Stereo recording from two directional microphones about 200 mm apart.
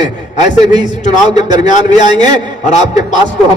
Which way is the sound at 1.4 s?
35° left (ahead or behind).